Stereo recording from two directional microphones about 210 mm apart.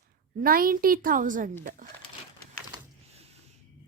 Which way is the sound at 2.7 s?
30° right (ahead or behind).